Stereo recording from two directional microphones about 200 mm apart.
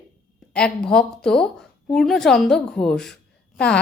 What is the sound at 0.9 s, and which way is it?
A woman's voice, 5° left (ahead or behind).